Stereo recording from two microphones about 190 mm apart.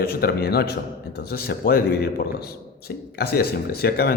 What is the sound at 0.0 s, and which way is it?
A man's voice, 55° left (ahead or behind).